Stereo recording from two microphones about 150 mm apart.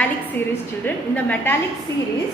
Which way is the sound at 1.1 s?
10° left (ahead or behind).